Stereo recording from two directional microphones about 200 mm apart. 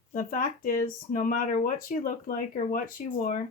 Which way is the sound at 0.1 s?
45° left (ahead or behind).